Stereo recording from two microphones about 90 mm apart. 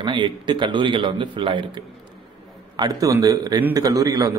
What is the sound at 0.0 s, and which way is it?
A man's voice, 60° right (ahead or behind).